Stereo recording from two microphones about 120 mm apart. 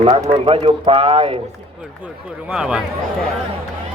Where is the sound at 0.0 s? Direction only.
50° right (ahead or behind).